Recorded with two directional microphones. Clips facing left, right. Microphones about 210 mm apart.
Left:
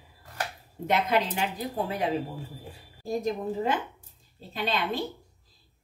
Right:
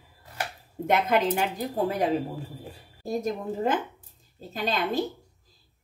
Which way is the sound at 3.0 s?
45° right (ahead or behind).